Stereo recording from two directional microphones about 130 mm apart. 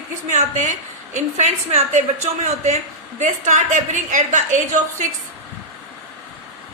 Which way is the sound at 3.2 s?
70° right (ahead or behind).